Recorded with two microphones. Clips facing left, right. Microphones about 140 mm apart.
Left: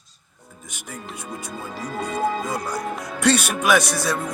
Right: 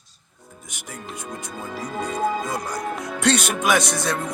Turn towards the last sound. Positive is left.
turn(degrees=-20)  # may be behind; listen again after turning